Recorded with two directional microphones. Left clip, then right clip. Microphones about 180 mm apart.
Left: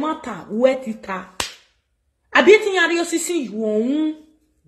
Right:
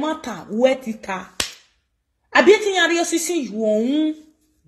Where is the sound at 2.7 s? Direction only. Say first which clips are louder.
Even; 25° right (ahead or behind).